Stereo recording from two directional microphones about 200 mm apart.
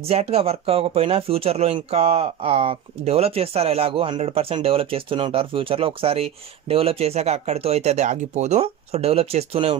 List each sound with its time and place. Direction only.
0.1 s speech: 30° right (ahead or behind)